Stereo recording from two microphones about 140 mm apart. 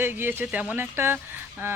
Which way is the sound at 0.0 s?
15° right (ahead or behind).